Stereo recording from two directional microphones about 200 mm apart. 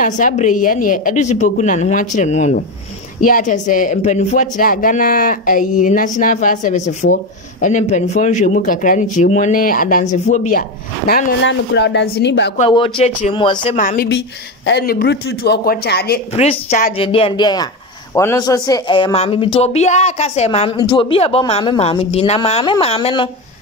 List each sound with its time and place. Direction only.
0.0 s speech: 40° left (ahead or behind)
11.4 s speech: 60° left (ahead or behind)
12.5 s speech: 25° left (ahead or behind)
13.7 s speech: 40° left (ahead or behind)
14.7 s speech: 55° left (ahead or behind)
16.3 s speech: 30° left (ahead or behind)